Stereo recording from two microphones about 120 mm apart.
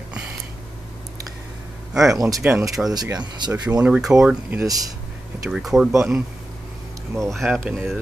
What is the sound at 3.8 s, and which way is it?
Speech, 5° right (ahead or behind).